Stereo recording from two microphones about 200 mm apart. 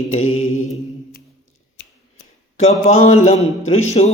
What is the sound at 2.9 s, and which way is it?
Mantra, 35° left (ahead or behind).